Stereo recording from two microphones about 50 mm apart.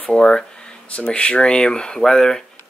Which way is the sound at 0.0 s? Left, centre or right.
Centre.